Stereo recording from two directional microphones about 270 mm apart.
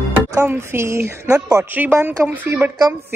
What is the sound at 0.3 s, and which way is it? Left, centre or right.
A woman's voice, centre.